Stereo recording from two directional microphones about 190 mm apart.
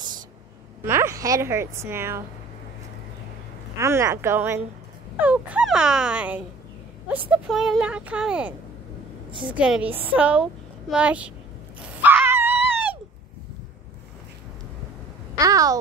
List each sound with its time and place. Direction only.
0.8 s a woman's voice: 15° right (ahead or behind)
3.7 s a woman's voice: 15° right (ahead or behind)
9.3 s a woman's voice: 25° right (ahead or behind)
9.6 s a woman's voice: 5° right (ahead or behind)
11.8 s a sound: 10° right (ahead or behind)
15.3 s a sound: 20° right (ahead or behind)